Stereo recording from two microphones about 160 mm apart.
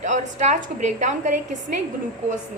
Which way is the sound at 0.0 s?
50° right (ahead or behind).